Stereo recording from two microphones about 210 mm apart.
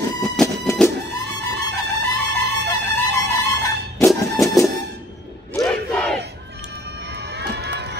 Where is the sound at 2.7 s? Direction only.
15° left (ahead or behind).